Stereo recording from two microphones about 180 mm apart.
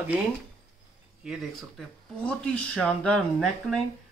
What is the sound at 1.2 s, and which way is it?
Speech, centre (ahead or behind).